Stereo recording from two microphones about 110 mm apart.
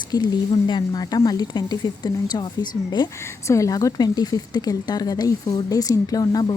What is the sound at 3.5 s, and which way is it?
A woman's voice, 30° left (ahead or behind).